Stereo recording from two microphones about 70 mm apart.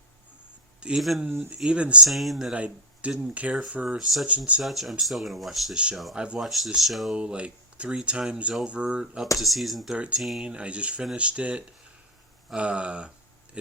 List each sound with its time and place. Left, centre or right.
0.8 s speech: centre
2.0 s speech: centre
2.5 s speech: centre
3.8 s speech: centre
4.3 s speech: centre
4.6 s speech: centre
5.7 s speech: centre
6.4 s speech: centre
7.1 s speech: centre
10.4 s speech: centre